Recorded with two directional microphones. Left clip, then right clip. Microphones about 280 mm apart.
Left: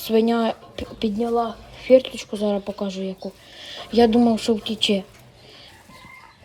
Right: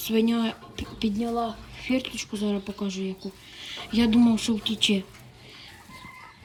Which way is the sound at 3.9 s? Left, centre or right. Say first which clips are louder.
Left 9 dB; centre.